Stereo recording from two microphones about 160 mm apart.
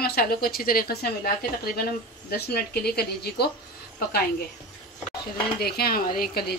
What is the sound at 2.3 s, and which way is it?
Stir, 80° left.